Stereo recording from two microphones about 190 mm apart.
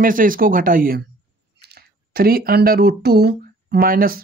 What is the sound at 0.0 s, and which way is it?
Speech, 45° right (ahead or behind).